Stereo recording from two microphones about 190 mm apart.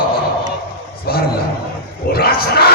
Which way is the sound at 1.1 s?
55° left (ahead or behind).